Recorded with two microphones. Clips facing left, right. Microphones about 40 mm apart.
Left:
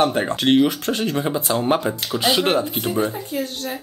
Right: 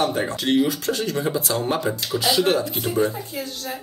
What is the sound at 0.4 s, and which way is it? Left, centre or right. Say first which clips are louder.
Speech: left 4 dB; left.